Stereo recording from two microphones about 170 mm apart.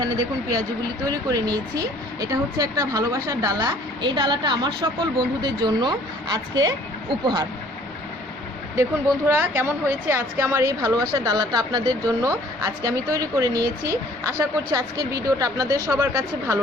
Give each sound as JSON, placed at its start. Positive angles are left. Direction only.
{"t": 0.0, "sound": "a woman's voice", "side_deg": -25}
{"t": 8.7, "sound": "a woman's voice", "side_deg": -15}